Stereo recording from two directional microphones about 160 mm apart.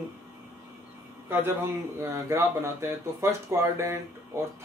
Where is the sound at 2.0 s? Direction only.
15° right (ahead or behind).